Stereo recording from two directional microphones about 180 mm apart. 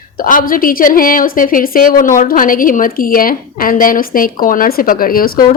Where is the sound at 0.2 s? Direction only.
50° left (ahead or behind).